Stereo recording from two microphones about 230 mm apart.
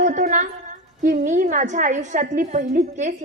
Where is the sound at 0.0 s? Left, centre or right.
Right.